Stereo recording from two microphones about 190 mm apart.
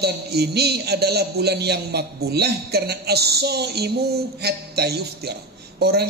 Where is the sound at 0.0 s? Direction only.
60° right (ahead or behind).